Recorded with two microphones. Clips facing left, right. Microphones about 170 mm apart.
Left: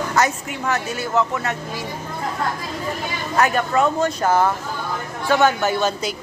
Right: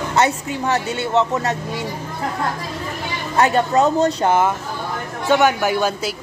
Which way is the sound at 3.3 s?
30° right (ahead or behind).